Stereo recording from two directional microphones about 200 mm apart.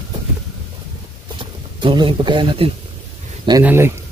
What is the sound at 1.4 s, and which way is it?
Speech, 25° right (ahead or behind).